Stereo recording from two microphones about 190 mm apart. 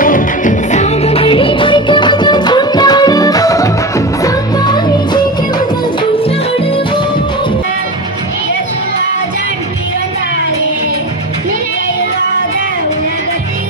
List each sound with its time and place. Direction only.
0.0 s music: 45° left (ahead or behind); by 5.2 s 20° left (ahead or behind)